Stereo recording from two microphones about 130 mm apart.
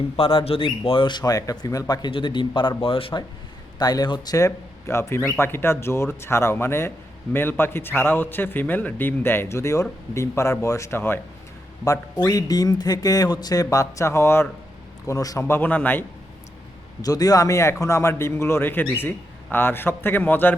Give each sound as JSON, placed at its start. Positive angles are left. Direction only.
{"t": 0.2, "sound": "speech", "side_deg": 45}
{"t": 3.8, "sound": "a man's voice", "side_deg": 30}
{"t": 11.9, "sound": "a man's voice", "side_deg": 30}
{"t": 17.0, "sound": "a man's voice", "side_deg": 30}